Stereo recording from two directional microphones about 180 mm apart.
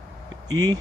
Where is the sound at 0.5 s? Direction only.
20° right (ahead or behind).